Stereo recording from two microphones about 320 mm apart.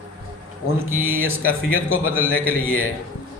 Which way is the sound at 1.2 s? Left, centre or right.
Left.